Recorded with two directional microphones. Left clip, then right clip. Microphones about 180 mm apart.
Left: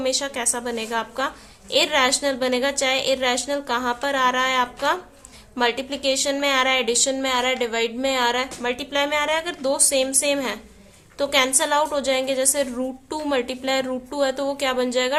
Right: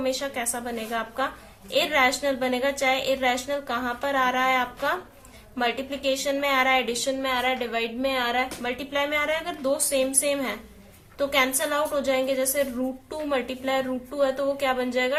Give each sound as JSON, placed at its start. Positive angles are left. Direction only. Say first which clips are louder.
{"t": 0.0, "sound": "a woman's voice", "louder": "left 4 dB", "side_deg": 45}